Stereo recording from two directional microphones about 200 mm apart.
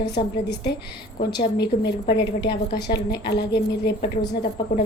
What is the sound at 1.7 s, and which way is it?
Speech, 40° left (ahead or behind).